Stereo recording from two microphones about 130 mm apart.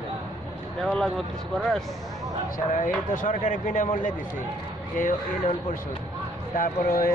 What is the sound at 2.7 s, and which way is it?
Speech, 85° left.